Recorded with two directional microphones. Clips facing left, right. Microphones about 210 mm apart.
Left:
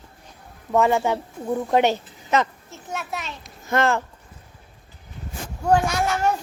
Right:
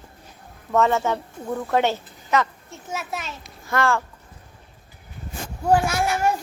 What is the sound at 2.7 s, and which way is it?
Speech, centre (ahead or behind).